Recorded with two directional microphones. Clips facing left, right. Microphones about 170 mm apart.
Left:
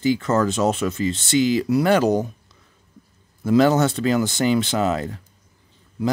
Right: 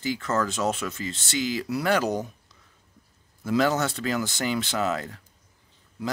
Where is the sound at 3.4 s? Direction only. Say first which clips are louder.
Left 7 dB; 25° left (ahead or behind).